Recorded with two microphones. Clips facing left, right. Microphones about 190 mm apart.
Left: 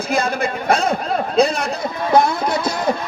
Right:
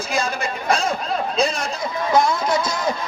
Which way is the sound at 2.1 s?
60° left (ahead or behind).